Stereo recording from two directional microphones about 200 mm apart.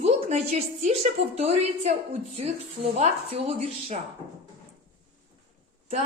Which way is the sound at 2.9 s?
35° right (ahead or behind).